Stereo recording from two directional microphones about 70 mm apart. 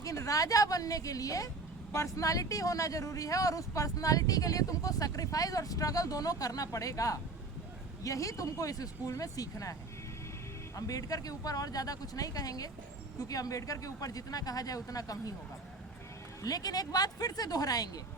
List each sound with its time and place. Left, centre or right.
0.0 s speech: left
10.8 s speech: left
16.4 s speech: left